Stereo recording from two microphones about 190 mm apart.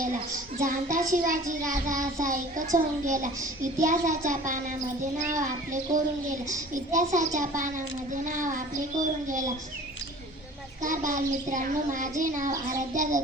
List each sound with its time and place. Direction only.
0.6 s a child's voice: 45° right (ahead or behind)
10.8 s a child's voice: 40° right (ahead or behind)